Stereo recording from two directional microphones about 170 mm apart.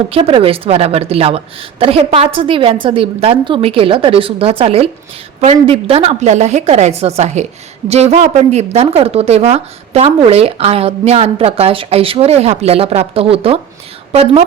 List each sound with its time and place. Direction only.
0.1 s a woman's voice: 35° right (ahead or behind)